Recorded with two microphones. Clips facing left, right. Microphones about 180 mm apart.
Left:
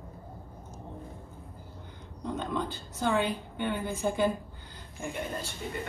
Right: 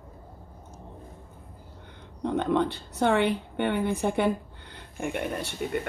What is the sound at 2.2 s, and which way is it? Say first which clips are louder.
A woman's voice: right 8 dB; 65° right (ahead or behind).